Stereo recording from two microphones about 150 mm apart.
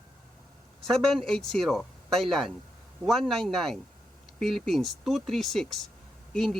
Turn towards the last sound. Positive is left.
turn(degrees=5)  # may be behind; listen again after turning